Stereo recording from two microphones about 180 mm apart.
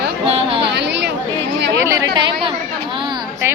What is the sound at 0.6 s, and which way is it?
Chatter, 75° right (ahead or behind).